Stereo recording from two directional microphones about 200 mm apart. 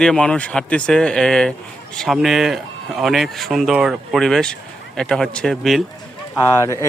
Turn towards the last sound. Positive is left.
turn(degrees=15)  # may be behind; listen again after turning